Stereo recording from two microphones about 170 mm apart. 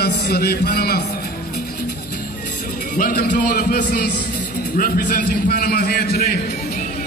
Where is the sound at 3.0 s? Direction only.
55° left (ahead or behind).